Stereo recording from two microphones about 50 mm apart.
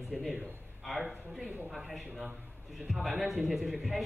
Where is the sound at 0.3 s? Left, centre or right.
Centre.